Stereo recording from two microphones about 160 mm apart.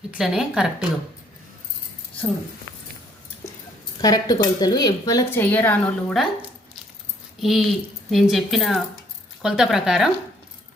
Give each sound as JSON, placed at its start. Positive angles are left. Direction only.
{"t": 0.1, "sound": "a woman's voice", "side_deg": -5}
{"t": 4.0, "sound": "speech", "side_deg": 25}
{"t": 5.3, "sound": "a woman's voice", "side_deg": 10}
{"t": 7.4, "sound": "a woman's voice", "side_deg": 0}